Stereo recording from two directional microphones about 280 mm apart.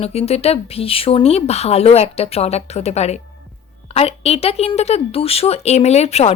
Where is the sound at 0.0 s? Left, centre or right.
Left.